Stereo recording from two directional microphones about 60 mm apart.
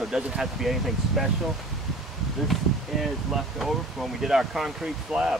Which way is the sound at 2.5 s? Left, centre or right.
Centre.